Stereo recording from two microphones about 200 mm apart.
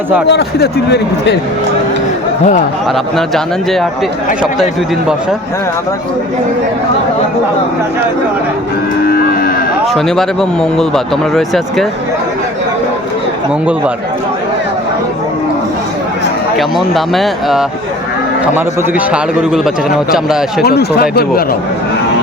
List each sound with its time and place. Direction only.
0.3 s speech: 55° left (ahead or behind)
2.9 s speech: centre (ahead or behind)
9.0 s cattle: 45° left (ahead or behind)
9.8 s speech: centre (ahead or behind)
16.6 s speech: centre (ahead or behind)
20.7 s speech: 50° left (ahead or behind)